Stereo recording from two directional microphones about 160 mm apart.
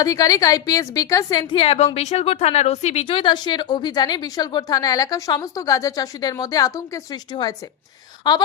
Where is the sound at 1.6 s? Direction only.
40° left (ahead or behind).